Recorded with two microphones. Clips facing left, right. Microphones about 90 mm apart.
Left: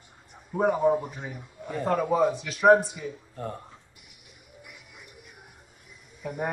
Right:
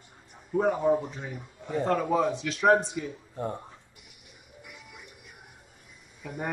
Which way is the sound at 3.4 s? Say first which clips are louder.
Right 4 dB; 20° right (ahead or behind).